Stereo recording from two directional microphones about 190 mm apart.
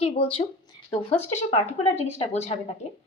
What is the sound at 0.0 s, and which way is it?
A woman's voice, 30° left (ahead or behind).